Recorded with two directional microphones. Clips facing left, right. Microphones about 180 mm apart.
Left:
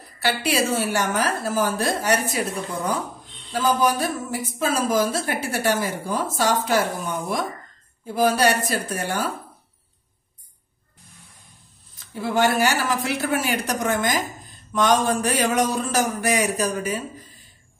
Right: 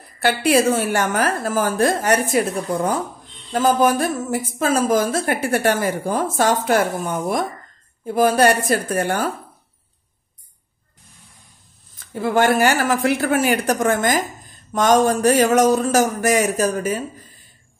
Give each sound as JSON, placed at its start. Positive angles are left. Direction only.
{"t": 0.2, "sound": "a woman's voice", "side_deg": -50}
{"t": 12.1, "sound": "a woman's voice", "side_deg": -55}